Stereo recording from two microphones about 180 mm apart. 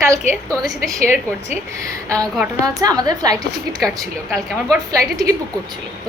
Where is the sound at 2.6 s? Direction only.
20° right (ahead or behind).